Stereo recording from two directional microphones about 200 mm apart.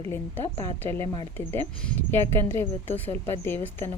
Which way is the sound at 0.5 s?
10° left (ahead or behind).